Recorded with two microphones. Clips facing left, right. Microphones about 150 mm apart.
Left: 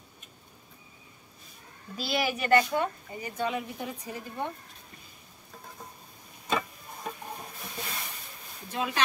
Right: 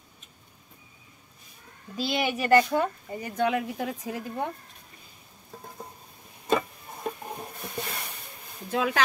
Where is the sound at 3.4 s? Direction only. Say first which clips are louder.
Right 6 dB; 90° right.